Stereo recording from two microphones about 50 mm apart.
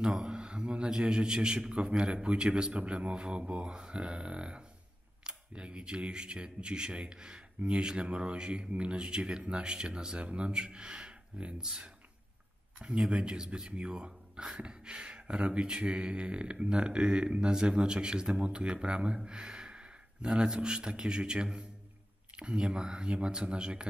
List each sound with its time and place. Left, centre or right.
0.0 s a man's voice: centre